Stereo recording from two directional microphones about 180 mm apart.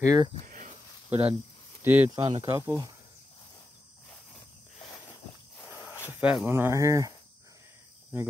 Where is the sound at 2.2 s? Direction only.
30° right (ahead or behind).